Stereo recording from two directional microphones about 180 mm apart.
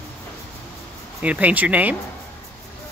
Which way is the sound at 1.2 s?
10° right (ahead or behind).